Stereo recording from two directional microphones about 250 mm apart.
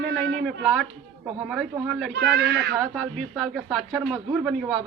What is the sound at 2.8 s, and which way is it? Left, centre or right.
A man's voice, centre.